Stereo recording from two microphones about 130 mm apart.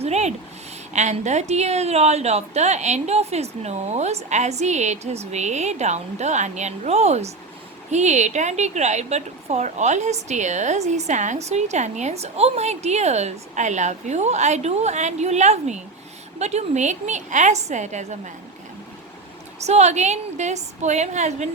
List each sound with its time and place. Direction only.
0.0 s a sound: 60° right (ahead or behind)
0.9 s a woman's voice: 65° right (ahead or behind)
19.6 s a woman's voice: 60° right (ahead or behind)